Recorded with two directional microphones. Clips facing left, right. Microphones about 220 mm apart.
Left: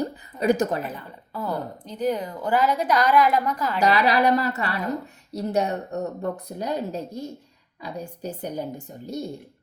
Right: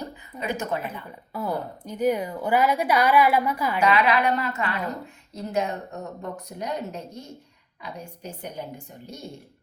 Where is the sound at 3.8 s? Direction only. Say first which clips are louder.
Left 2 dB; 35° left (ahead or behind).